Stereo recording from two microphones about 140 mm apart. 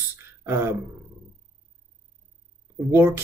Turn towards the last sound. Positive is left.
turn(degrees=-15)  # may be behind; listen again after turning